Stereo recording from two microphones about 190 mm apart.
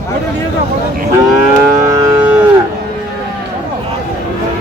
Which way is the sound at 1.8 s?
15° right (ahead or behind).